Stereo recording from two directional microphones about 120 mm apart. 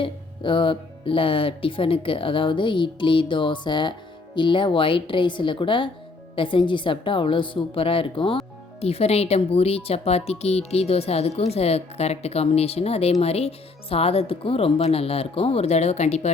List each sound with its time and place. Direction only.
0.0 s speech: 45° left (ahead or behind)
8.8 s speech: 60° left (ahead or behind)